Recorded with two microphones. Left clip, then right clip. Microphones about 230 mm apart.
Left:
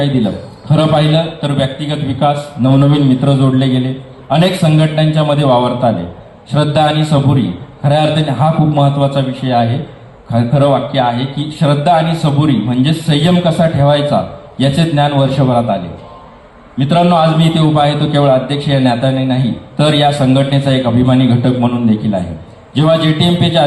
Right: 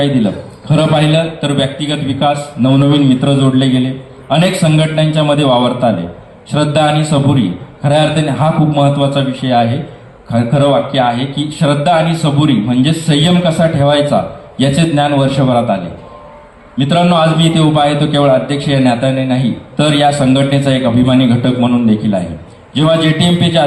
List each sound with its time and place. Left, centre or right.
0.0 s a man's voice: right